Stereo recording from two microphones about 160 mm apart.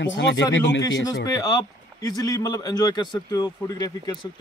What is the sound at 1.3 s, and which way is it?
Speech, 25° left (ahead or behind).